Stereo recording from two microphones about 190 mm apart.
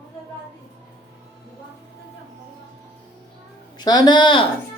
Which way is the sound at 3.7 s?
20° left (ahead or behind).